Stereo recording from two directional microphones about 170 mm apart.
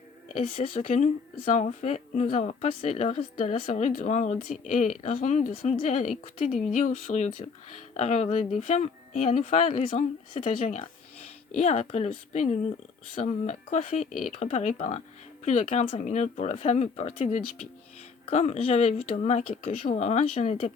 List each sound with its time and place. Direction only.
0.5 s speech: 35° left (ahead or behind)
10.4 s speech: 50° left (ahead or behind)